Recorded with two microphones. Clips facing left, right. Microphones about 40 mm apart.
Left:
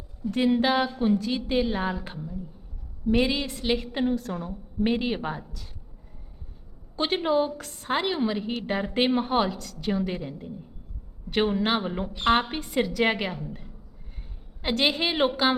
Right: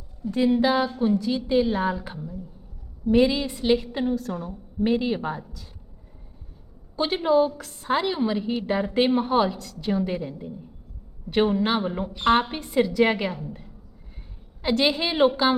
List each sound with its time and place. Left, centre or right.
0.4 s a woman's voice: centre
3.4 s a woman's voice: centre
3.9 s a woman's voice: centre
4.8 s a woman's voice: left
6.9 s a woman's voice: centre
7.6 s a woman's voice: centre
7.9 s a woman's voice: centre
9.5 s a woman's voice: centre